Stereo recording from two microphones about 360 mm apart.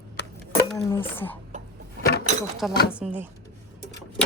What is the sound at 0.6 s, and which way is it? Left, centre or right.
Speech, centre.